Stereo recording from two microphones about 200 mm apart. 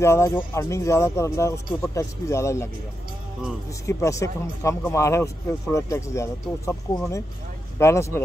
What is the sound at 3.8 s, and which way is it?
A man's voice, 15° left (ahead or behind).